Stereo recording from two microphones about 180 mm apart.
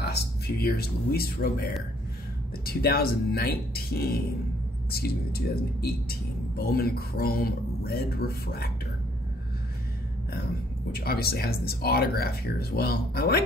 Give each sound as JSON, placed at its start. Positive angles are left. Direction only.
{"t": 0.0, "sound": "speech", "side_deg": 65}
{"t": 10.9, "sound": "speech", "side_deg": 60}